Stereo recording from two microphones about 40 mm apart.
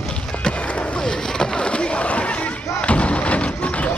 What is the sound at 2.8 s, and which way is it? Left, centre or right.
Thump, left.